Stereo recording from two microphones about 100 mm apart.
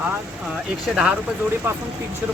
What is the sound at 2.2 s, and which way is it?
Speech, 20° right (ahead or behind).